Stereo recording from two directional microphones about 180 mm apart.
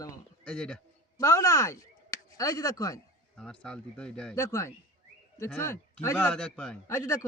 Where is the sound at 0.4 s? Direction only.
5° left (ahead or behind).